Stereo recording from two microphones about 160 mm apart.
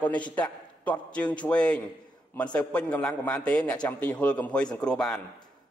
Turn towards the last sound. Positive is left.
turn(degrees=5)  # may be behind; listen again after turning